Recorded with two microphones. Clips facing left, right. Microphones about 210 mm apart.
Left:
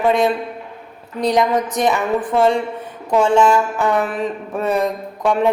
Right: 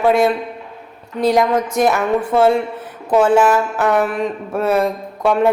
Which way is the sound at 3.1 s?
5° right (ahead or behind).